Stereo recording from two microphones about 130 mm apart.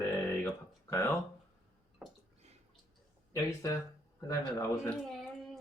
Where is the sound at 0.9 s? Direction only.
20° left (ahead or behind).